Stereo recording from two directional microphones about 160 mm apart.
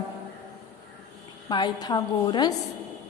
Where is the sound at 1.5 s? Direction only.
25° left (ahead or behind).